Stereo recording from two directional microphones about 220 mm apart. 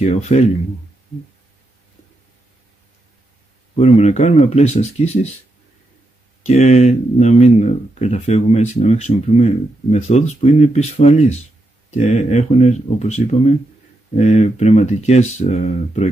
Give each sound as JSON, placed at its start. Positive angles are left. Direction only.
{"t": 0.0, "sound": "speech", "side_deg": 30}
{"t": 3.7, "sound": "speech", "side_deg": 30}
{"t": 6.4, "sound": "speech", "side_deg": 30}